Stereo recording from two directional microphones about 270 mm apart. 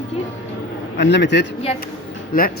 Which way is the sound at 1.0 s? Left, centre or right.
Left.